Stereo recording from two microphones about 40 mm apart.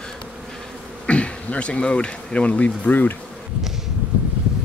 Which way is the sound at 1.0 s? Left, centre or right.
Left.